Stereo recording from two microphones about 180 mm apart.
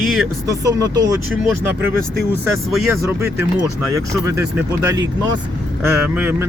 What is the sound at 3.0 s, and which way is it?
Speech, 15° right (ahead or behind).